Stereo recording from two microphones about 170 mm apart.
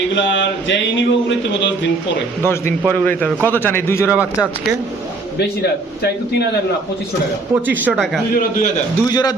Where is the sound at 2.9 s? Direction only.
10° left (ahead or behind).